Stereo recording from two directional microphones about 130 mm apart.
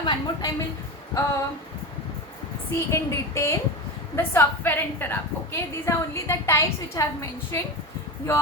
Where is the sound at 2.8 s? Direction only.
25° left (ahead or behind).